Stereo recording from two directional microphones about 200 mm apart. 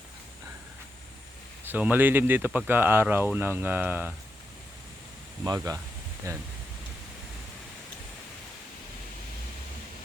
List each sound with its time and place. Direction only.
1.6 s speech: 10° right (ahead or behind)
5.4 s speech: 15° right (ahead or behind)